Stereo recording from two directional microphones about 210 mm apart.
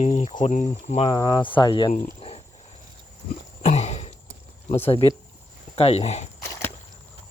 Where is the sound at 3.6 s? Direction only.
30° left (ahead or behind).